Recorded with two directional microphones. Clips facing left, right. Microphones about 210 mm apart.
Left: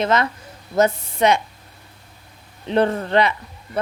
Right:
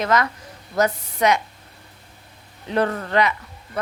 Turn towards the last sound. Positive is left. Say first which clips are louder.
# left 3 dB
turn(degrees=30)  # may be behind; listen again after turning